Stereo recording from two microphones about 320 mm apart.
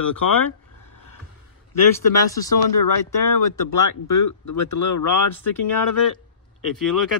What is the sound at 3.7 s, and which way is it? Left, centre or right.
Speech, left.